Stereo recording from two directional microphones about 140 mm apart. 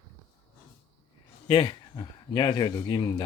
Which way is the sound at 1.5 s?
30° left (ahead or behind).